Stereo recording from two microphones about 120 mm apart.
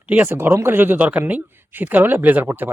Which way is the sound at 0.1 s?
15° right (ahead or behind).